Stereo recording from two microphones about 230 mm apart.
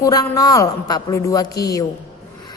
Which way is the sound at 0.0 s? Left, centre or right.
Centre.